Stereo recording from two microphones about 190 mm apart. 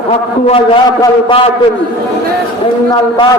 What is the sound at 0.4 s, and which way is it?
Speech, 30° left (ahead or behind).